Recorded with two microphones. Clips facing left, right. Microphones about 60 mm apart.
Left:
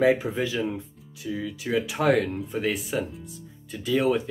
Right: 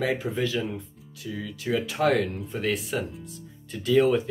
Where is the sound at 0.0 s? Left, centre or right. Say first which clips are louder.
Left 4 dB; centre.